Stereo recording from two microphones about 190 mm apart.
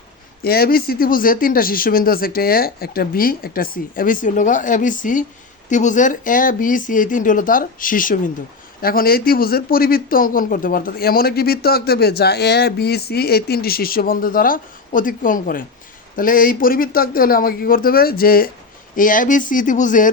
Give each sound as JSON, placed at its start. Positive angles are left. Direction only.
{"t": 0.4, "sound": "speech", "side_deg": 55}